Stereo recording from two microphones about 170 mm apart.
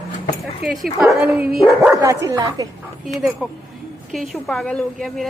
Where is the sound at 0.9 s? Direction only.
5° right (ahead or behind).